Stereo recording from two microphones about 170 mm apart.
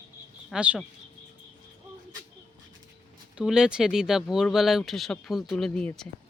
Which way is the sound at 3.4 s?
5° right (ahead or behind).